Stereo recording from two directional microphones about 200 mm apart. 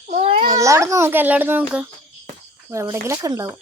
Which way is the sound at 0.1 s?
30° right (ahead or behind).